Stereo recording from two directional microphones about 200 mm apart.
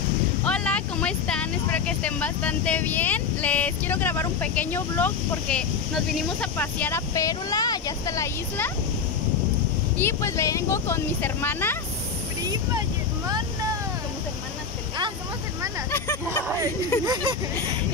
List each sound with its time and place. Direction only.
0.5 s speech: 5° left (ahead or behind)
9.9 s speech: 15° left (ahead or behind)
17.0 s a sound: 20° right (ahead or behind)